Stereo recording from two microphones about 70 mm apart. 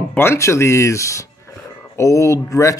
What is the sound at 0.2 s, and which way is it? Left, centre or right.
Speech, left.